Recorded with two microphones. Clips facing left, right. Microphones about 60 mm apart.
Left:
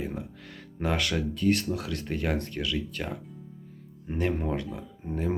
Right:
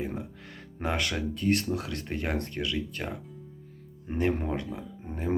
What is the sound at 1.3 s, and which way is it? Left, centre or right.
Speech, right.